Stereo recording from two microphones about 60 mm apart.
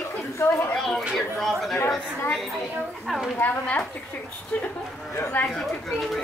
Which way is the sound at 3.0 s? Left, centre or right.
Centre.